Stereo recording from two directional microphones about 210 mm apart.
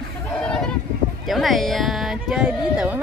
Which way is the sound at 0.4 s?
5° left (ahead or behind).